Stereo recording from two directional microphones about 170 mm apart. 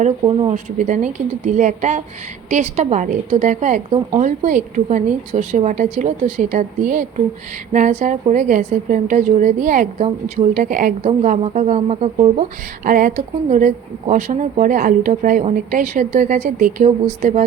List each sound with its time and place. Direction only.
0.2 s speech: 30° right (ahead or behind)
0.5 s a woman's voice: 45° right (ahead or behind)
12.8 s a woman's voice: 50° right (ahead or behind)